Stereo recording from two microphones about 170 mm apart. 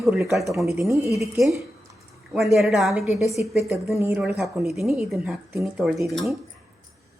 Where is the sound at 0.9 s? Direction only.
20° right (ahead or behind).